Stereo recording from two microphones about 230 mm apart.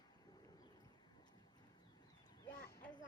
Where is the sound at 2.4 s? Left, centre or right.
Left.